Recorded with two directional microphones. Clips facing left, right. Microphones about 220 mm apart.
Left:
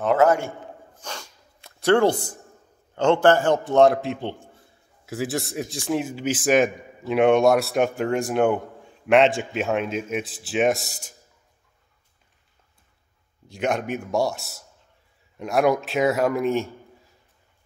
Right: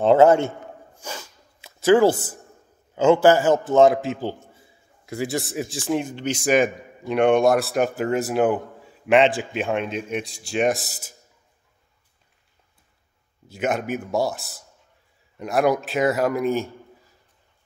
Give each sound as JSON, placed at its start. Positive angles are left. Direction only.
{"t": 0.0, "sound": "a man's voice", "side_deg": -25}
{"t": 1.0, "sound": "a sound", "side_deg": -5}
{"t": 2.9, "sound": "speech", "side_deg": -5}
{"t": 13.5, "sound": "speech", "side_deg": -5}